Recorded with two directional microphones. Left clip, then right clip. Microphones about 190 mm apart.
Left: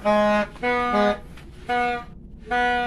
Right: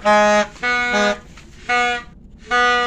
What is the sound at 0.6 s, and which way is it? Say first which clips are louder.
Music: right 4 dB; 25° left (ahead or behind).